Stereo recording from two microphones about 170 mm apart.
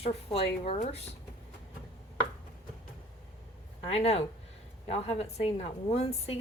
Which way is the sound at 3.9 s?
40° left (ahead or behind).